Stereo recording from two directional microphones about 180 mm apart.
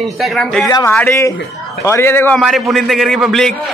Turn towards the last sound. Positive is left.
turn(degrees=0)  # may be behind; listen again after turning